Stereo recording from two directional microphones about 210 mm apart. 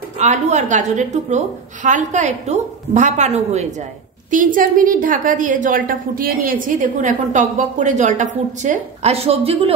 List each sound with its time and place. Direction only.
0.2 s a woman's voice: 35° right (ahead or behind)